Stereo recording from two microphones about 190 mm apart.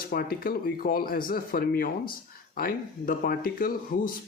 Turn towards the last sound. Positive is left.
turn(degrees=45)  # may be behind; listen again after turning